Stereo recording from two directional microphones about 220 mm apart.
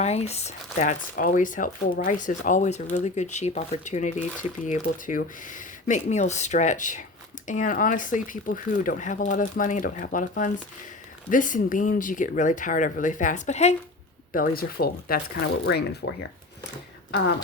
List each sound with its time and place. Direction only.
0.0 s speech: 30° left (ahead or behind)
14.3 s speech: 40° left (ahead or behind)